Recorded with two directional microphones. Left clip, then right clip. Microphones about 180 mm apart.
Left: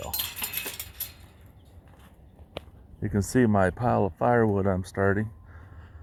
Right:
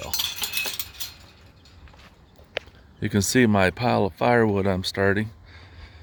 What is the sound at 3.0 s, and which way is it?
Speech, 45° right (ahead or behind).